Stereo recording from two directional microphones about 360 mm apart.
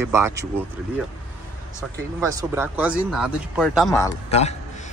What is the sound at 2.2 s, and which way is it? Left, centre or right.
Speech, centre.